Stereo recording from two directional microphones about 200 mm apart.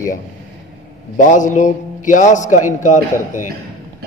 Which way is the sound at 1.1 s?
40° left (ahead or behind).